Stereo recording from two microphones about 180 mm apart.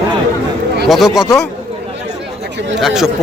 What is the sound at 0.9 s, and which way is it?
Speech, centre (ahead or behind).